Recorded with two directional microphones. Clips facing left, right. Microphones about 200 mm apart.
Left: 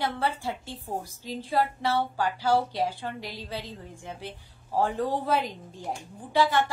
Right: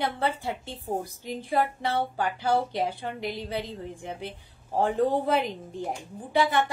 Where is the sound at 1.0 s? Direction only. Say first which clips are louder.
Right 2 dB; 55° right (ahead or behind).